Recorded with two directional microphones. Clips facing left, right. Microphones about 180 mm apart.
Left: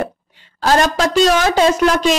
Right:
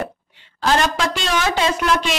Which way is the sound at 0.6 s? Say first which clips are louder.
Left 4 dB; 40° left (ahead or behind).